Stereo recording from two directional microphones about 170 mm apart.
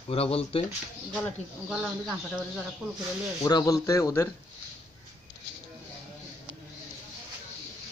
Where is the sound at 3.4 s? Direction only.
20° left (ahead or behind).